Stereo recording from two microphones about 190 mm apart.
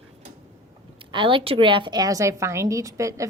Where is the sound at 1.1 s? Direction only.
25° right (ahead or behind).